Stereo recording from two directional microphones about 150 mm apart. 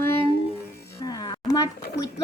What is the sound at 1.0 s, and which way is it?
Music, 25° left (ahead or behind).